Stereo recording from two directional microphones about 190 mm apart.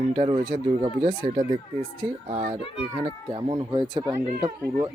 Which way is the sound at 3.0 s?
25° right (ahead or behind).